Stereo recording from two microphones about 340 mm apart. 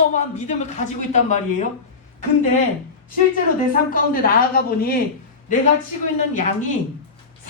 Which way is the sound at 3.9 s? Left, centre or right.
Left.